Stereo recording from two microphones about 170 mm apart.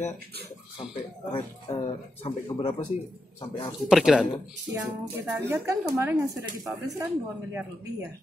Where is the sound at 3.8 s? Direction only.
5° right (ahead or behind).